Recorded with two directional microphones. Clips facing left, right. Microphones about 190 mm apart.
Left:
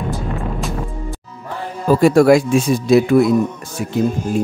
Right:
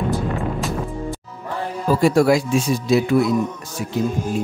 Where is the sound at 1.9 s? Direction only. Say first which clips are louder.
Left 5 dB; 55° left (ahead or behind).